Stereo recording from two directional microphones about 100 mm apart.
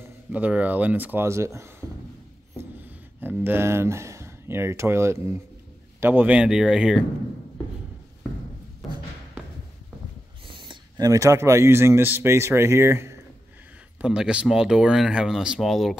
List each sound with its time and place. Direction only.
0.3 s speech: 15° right (ahead or behind)
1.2 s speech: 30° right (ahead or behind); by 7.1 s 5° right (ahead or behind)
10.5 s a sound: 55° right (ahead or behind)
11.0 s speech: 35° right (ahead or behind)
14.0 s speech: 10° right (ahead or behind)